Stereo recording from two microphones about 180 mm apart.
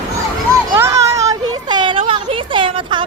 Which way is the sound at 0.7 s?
15° right (ahead or behind).